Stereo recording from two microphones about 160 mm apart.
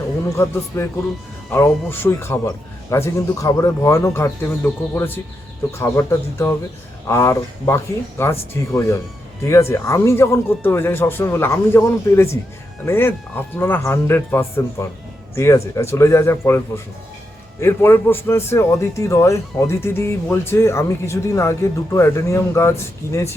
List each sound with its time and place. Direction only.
0.3 s a man's voice: 20° left (ahead or behind)